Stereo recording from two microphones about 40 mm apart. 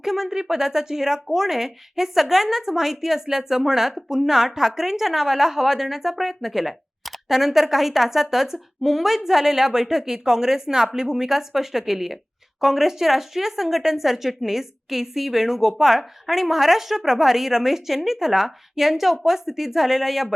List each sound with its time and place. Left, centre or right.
0.0 s speech: centre